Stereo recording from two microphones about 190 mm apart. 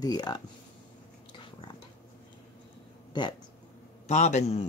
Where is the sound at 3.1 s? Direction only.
25° left (ahead or behind).